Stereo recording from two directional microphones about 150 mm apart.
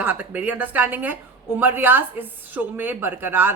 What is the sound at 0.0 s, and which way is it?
A woman's voice, 10° right (ahead or behind).